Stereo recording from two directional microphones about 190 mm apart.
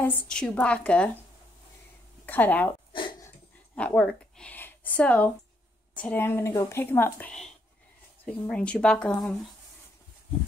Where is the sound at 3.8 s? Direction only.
5° left (ahead or behind).